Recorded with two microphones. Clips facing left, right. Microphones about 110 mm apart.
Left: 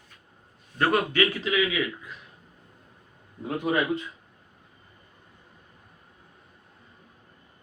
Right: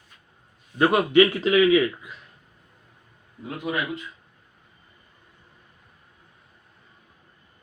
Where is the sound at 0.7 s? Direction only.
15° right (ahead or behind).